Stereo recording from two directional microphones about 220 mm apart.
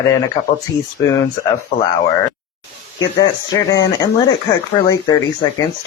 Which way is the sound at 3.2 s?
15° left (ahead or behind).